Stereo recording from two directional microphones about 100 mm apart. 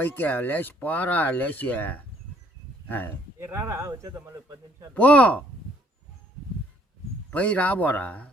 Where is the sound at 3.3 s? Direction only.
25° right (ahead or behind).